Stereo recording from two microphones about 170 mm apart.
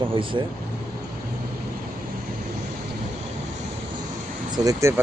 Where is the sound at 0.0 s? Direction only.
30° right (ahead or behind).